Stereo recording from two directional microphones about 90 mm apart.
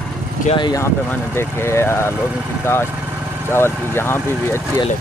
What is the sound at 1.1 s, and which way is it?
Speech, 25° left (ahead or behind).